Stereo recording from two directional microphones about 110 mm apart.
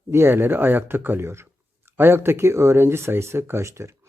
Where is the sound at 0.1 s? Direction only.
20° right (ahead or behind).